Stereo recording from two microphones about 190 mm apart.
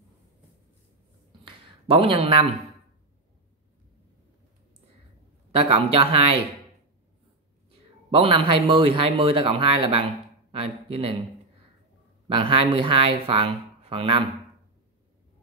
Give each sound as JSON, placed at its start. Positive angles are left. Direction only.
{"t": 1.4, "sound": "a sound", "side_deg": -30}
{"t": 5.5, "sound": "speech", "side_deg": -30}
{"t": 8.1, "sound": "speech", "side_deg": -30}
{"t": 12.3, "sound": "speech", "side_deg": -30}